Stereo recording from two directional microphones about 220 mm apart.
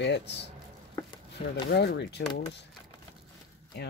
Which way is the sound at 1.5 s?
50° left (ahead or behind).